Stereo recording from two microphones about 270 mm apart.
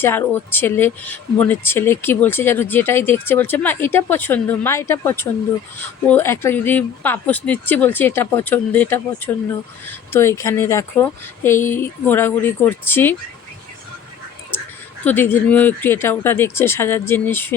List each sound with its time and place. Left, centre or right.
0.0 s speech: centre
15.0 s speech: centre